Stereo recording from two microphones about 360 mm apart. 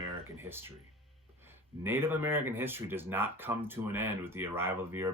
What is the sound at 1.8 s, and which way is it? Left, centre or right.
Speech, centre.